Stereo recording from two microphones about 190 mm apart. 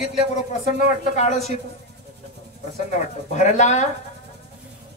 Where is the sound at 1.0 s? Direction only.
40° left (ahead or behind).